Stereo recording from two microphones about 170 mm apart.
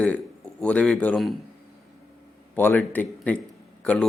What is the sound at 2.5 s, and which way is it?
A man's voice, 10° left (ahead or behind).